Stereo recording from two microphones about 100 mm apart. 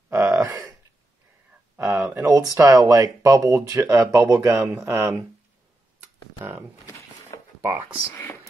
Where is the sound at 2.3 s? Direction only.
35° right (ahead or behind).